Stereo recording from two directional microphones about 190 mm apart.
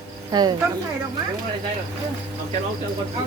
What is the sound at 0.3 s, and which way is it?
Speech, 20° right (ahead or behind).